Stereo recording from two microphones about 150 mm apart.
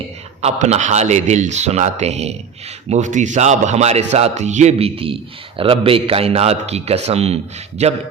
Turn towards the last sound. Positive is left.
turn(degrees=-45)  # may be behind; listen again after turning